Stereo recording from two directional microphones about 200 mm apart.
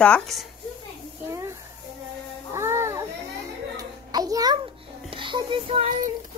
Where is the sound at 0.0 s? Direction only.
5° left (ahead or behind).